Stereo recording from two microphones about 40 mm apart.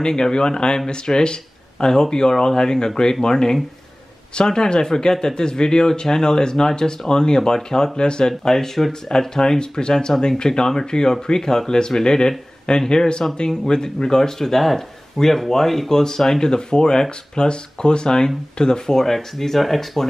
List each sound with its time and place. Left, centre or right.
0.0 s speech: centre